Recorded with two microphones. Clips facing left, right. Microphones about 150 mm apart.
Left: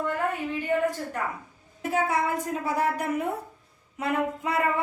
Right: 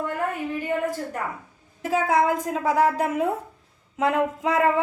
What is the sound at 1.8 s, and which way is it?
A woman's voice, 90° right.